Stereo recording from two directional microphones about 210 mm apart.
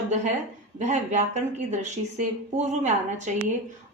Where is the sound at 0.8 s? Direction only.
35° right (ahead or behind).